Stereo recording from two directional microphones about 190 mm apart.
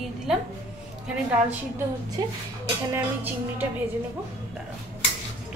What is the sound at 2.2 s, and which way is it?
Speech, 20° right (ahead or behind).